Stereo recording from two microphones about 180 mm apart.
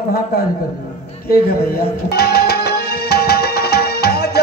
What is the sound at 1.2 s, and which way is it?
Music, 55° left (ahead or behind).